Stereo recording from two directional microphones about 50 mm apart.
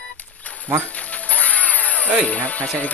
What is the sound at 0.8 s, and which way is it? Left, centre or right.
Music, left.